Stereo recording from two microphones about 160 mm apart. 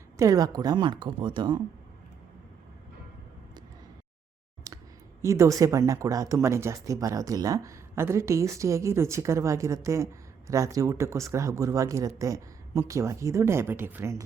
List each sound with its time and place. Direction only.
0.2 s speech: 20° right (ahead or behind)
4.7 s a sound: 25° right (ahead or behind)
5.2 s speech: 20° right (ahead or behind)